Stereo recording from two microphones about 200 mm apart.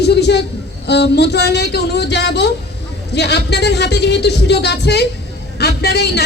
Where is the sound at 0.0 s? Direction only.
55° left (ahead or behind).